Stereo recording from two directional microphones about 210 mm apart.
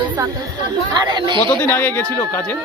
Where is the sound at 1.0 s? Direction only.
20° right (ahead or behind).